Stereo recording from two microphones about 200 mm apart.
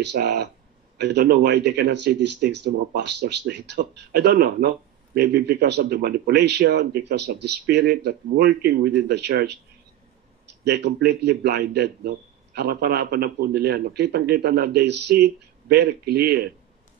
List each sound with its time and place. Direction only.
0.0 s a man's voice: 55° right (ahead or behind)
10.6 s a man's voice: 55° right (ahead or behind)